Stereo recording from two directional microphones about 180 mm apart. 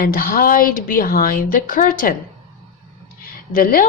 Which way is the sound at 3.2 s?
55° left (ahead or behind).